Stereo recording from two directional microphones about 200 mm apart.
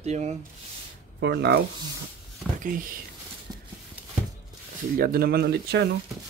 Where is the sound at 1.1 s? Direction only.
55° right (ahead or behind).